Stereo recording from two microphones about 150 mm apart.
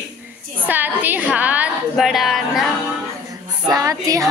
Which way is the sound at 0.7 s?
10° right (ahead or behind).